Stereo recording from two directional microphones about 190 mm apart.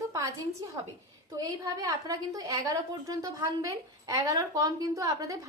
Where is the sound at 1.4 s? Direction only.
20° right (ahead or behind).